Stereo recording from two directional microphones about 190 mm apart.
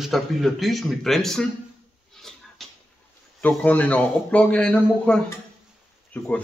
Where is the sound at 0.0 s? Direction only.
Centre (ahead or behind).